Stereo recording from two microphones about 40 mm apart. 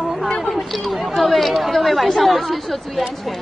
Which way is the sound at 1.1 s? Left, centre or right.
Centre.